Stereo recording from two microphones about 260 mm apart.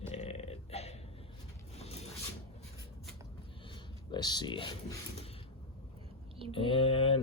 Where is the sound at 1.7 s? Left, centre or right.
Left.